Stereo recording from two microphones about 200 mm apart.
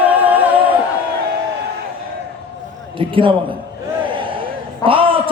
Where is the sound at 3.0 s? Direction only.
25° right (ahead or behind).